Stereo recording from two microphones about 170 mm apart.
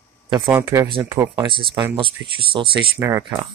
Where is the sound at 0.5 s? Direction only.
15° right (ahead or behind).